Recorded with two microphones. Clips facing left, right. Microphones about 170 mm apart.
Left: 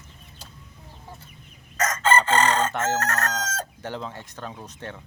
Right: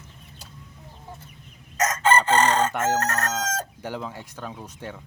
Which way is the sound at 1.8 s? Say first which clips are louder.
Right 1 dB; 15° right (ahead or behind).